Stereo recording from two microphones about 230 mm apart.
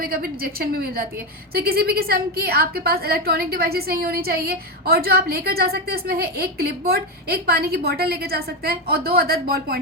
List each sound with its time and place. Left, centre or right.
0.0 s a woman's voice: right